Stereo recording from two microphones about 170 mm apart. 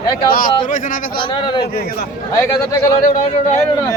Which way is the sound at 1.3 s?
25° left (ahead or behind).